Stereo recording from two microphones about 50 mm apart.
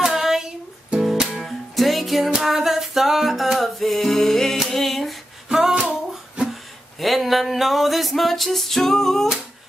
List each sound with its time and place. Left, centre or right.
0.0 s female singing: centre
1.3 s music: centre
5.5 s female singing: centre
5.9 s music: right
6.5 s a sound: centre